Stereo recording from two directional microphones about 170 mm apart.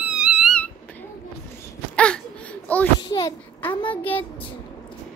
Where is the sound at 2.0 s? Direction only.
5° left (ahead or behind).